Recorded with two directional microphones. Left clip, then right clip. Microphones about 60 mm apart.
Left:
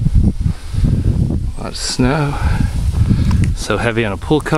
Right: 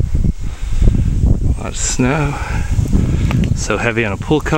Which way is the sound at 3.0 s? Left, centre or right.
Centre.